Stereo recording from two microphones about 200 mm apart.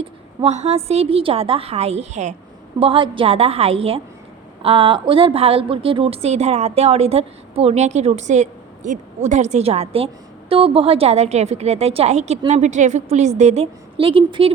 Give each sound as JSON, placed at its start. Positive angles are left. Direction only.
{"t": 0.0, "sound": "a woman's voice", "side_deg": -30}